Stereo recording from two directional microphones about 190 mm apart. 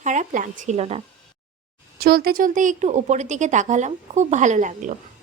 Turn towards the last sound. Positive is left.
turn(degrees=-40)  # may be behind; listen again after turning